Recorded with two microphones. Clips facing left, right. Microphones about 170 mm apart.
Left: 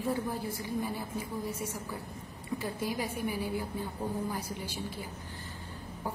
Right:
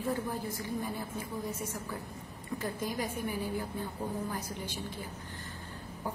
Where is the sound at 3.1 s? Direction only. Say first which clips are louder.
Left 1 dB; 10° left (ahead or behind).